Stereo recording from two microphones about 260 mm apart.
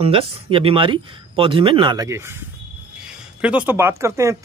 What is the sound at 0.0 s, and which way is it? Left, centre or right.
A man's voice, right.